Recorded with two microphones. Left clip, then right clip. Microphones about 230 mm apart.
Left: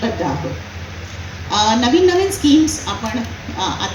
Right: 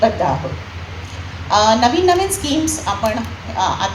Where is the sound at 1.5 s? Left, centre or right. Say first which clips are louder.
Right 3 dB; right.